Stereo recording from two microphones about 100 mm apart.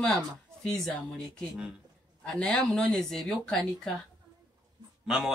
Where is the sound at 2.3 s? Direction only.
5° left (ahead or behind).